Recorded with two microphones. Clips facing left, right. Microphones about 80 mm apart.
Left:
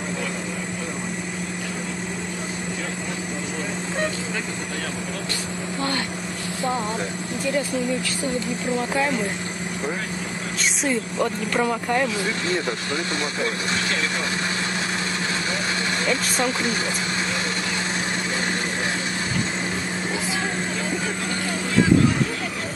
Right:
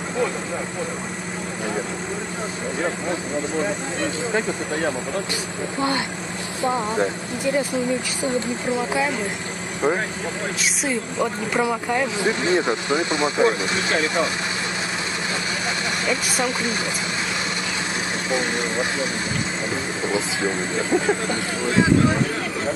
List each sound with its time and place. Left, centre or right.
6.6 s speech: right
10.6 s speech: centre
12.2 s speech: right
16.1 s speech: centre